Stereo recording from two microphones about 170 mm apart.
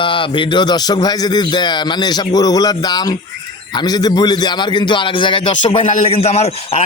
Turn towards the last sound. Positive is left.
turn(degrees=35)  # may be behind; listen again after turning